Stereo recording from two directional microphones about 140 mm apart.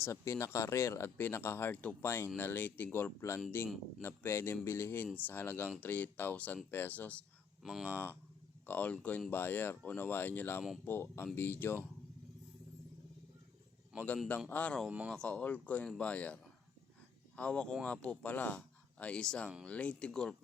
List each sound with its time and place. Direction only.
0.0 s speech: 20° left (ahead or behind)
7.6 s speech: 5° right (ahead or behind)
8.6 s speech: 10° left (ahead or behind)
14.5 s speech: 10° left (ahead or behind)
14.8 s speech: 10° right (ahead or behind)
15.1 s speech: 5° left (ahead or behind)